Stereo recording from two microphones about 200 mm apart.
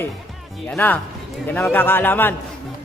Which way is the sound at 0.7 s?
10° left (ahead or behind).